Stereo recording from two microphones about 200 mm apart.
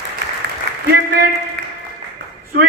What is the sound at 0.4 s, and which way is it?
Applause, 55° right (ahead or behind).